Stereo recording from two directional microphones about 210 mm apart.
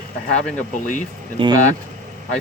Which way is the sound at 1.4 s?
20° right (ahead or behind).